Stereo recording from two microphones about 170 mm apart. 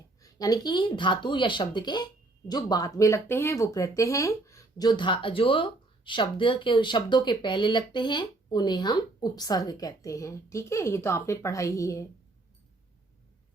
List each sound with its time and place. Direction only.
0.2 s speech: 20° left (ahead or behind)